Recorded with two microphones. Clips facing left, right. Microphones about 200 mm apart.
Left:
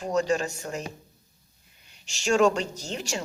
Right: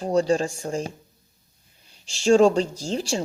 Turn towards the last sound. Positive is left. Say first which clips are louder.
# right 6 dB
turn(degrees=-30)  # may be behind; listen again after turning